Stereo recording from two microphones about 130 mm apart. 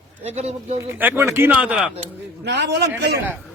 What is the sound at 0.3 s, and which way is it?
Speech, 55° right (ahead or behind).